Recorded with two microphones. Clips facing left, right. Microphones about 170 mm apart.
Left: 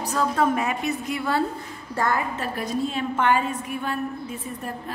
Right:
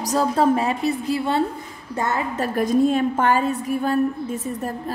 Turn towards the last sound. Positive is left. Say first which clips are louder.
# right 8 dB
turn(degrees=-40)  # may be behind; listen again after turning